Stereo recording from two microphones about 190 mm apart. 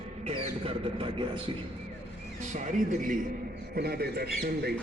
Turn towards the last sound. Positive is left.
turn(degrees=-55)  # may be behind; listen again after turning